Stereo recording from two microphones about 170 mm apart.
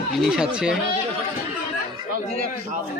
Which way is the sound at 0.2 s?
5° right (ahead or behind).